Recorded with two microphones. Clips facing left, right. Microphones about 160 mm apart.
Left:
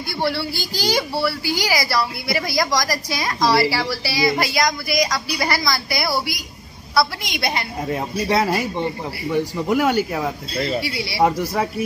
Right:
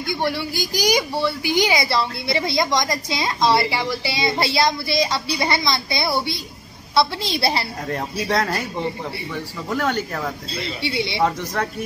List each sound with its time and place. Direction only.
0.2 s a woman's voice: 15° right (ahead or behind); by 7.6 s 30° right (ahead or behind)
7.9 s a man's voice: 5° left (ahead or behind)
9.3 s a man's voice: 15° left (ahead or behind)
10.8 s a woman's voice: 25° right (ahead or behind)
11.2 s a man's voice: 10° left (ahead or behind)